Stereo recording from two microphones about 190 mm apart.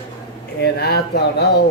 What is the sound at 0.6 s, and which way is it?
Speech, 60° left (ahead or behind).